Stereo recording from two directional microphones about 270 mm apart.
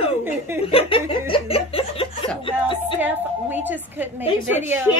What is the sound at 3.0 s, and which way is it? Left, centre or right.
A woman's voice, centre.